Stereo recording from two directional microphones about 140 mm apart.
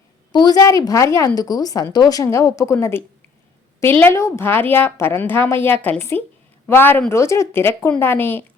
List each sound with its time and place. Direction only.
0.3 s a woman's voice: 25° left (ahead or behind)
4.0 s a woman's voice: 20° left (ahead or behind)